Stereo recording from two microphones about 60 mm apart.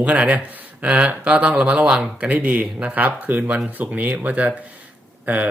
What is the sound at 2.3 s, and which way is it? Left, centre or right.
Speech, right.